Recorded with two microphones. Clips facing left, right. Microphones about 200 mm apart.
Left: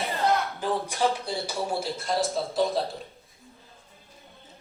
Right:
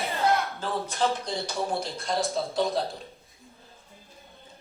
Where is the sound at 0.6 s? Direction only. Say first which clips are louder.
Left 2 dB; 15° left (ahead or behind).